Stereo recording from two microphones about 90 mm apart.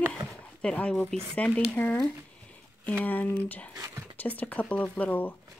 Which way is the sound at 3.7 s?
40° right (ahead or behind).